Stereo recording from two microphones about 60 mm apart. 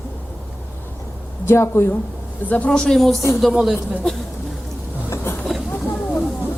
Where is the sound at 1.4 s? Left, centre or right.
Left.